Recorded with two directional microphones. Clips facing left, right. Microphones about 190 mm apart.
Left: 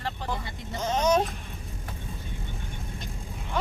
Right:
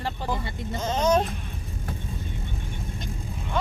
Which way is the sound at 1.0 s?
10° left (ahead or behind).